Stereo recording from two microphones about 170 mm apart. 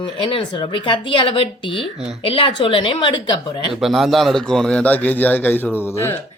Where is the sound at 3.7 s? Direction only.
Centre (ahead or behind).